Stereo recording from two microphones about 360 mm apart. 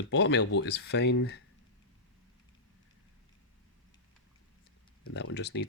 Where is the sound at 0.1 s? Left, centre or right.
Left.